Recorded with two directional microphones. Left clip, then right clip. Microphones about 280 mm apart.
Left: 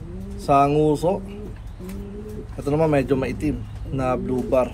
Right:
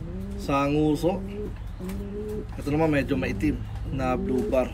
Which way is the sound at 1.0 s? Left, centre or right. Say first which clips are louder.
Left 4 dB; left.